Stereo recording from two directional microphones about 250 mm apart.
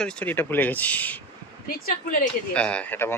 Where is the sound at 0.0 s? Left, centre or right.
Centre.